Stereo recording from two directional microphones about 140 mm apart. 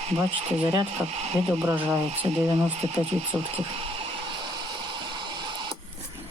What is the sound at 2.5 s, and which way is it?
Speech, 50° right (ahead or behind).